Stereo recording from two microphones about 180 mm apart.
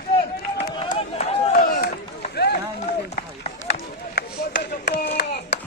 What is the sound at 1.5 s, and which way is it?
Run, 55° left (ahead or behind).